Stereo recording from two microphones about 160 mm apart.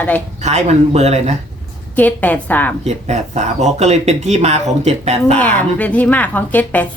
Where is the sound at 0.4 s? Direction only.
45° right (ahead or behind).